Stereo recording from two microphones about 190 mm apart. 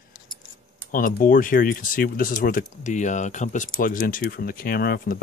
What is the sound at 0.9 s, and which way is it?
Speech, 45° left (ahead or behind).